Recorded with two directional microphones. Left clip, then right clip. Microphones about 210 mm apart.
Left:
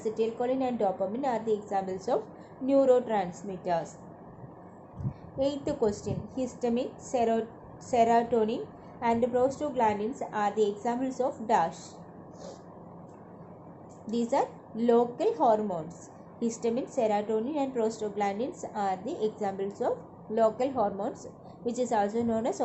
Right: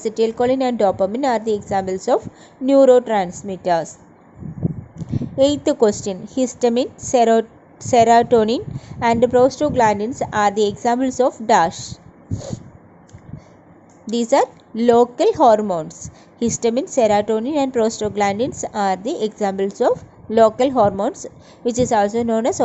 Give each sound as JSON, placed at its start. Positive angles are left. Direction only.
{"t": 0.0, "sound": "a woman's voice", "side_deg": -35}
{"t": 5.4, "sound": "a woman's voice", "side_deg": -35}
{"t": 14.1, "sound": "a woman's voice", "side_deg": -35}